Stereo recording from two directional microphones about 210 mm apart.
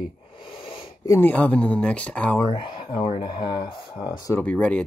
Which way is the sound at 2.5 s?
25° left (ahead or behind).